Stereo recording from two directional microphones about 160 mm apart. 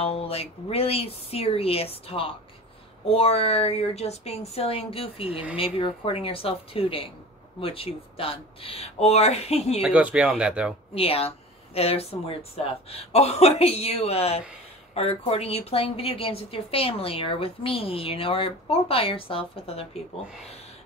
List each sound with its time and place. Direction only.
0.0 s a woman's voice: 40° left (ahead or behind)
9.8 s speech: 10° right (ahead or behind)
11.0 s a woman's voice: 40° left (ahead or behind)